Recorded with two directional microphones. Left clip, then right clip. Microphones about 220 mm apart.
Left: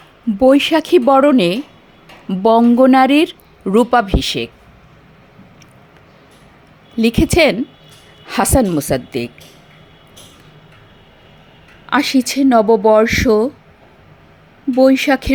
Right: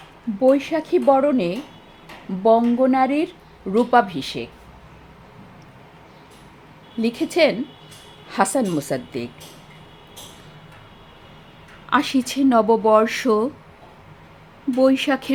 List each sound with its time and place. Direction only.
0.3 s speech: 35° left (ahead or behind)
7.0 s speech: 30° left (ahead or behind)
11.9 s speech: 20° left (ahead or behind)
14.8 s speech: 20° left (ahead or behind)